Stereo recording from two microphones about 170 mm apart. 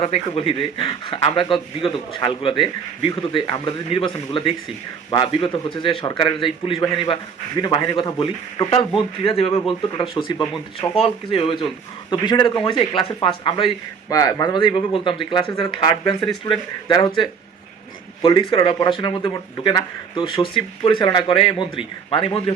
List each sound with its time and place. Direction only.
0.0 s a man's voice: 35° left (ahead or behind)
18.2 s a man's voice: 30° left (ahead or behind)